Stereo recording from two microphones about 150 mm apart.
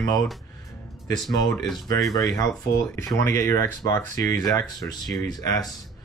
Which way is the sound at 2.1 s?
20° left (ahead or behind).